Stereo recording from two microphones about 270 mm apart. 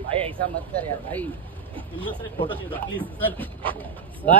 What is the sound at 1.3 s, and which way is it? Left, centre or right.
Vehicle, centre.